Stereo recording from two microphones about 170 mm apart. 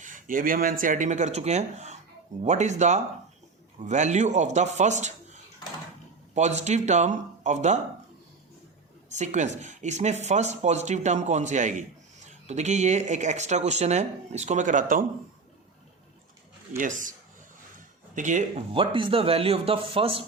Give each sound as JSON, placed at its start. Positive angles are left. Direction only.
{"t": 0.0, "sound": "speech", "side_deg": -50}
{"t": 9.0, "sound": "speech", "side_deg": -45}
{"t": 16.7, "sound": "speech", "side_deg": -50}
{"t": 17.7, "sound": "a sound", "side_deg": -45}
{"t": 18.7, "sound": "speech", "side_deg": -30}